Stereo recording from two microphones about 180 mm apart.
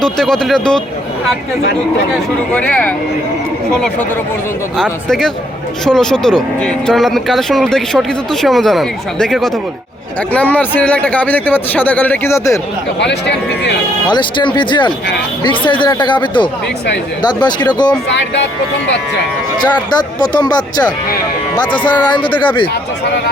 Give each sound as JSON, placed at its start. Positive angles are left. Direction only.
{"t": 0.0, "sound": "speech", "side_deg": 5}
{"t": 2.5, "sound": "speech", "side_deg": 10}
{"t": 4.8, "sound": "speech", "side_deg": 5}
{"t": 13.0, "sound": "speech", "side_deg": 70}
{"t": 14.1, "sound": "speech", "side_deg": 25}
{"t": 19.6, "sound": "speech", "side_deg": 25}